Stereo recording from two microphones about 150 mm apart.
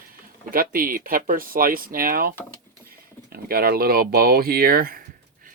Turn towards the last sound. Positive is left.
turn(degrees=-80)